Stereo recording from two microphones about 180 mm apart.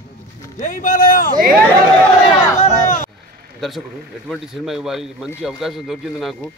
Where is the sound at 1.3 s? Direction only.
50° right (ahead or behind).